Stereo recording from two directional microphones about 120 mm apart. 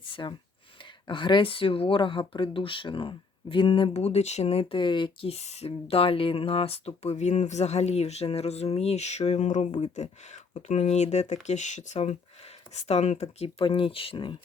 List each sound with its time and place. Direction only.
0.0 s a sound: 45° left (ahead or behind)
1.0 s speech: 40° left (ahead or behind)
5.3 s speech: 65° left (ahead or behind)
11.4 s speech: 80° left
13.4 s speech: 50° left (ahead or behind)